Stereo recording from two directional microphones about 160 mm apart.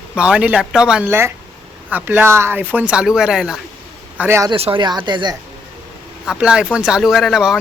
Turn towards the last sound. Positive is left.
turn(degrees=-5)  # may be behind; listen again after turning